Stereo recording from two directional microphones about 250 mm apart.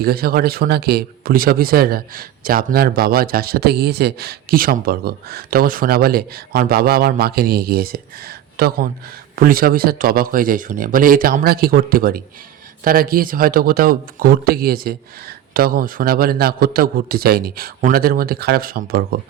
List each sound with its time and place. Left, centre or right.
0.0 s a man's voice: right